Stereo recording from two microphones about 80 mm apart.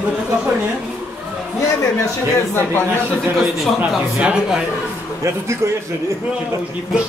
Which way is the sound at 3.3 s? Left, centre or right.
Centre.